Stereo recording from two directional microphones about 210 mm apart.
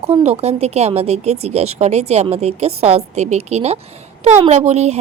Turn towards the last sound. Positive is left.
turn(degrees=-30)  # may be behind; listen again after turning